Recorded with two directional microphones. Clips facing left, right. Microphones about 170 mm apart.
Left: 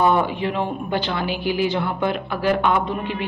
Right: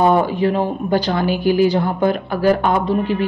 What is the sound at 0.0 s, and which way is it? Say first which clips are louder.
Speech: right 4 dB; 40° right (ahead or behind).